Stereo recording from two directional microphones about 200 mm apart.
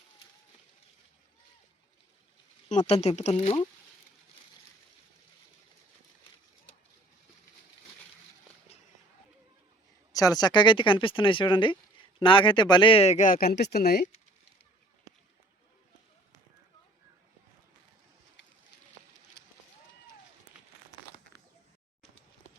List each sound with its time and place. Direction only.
2.6 s a man's voice: 30° left (ahead or behind)
10.1 s a man's voice: 20° left (ahead or behind); by 14.1 s 50° left (ahead or behind)